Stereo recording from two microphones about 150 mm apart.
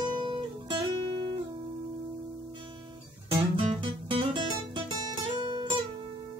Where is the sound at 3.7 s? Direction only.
30° right (ahead or behind).